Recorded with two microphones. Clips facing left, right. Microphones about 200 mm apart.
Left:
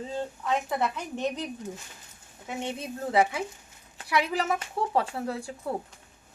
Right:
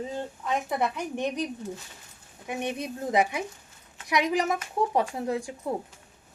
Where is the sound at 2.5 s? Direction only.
15° right (ahead or behind).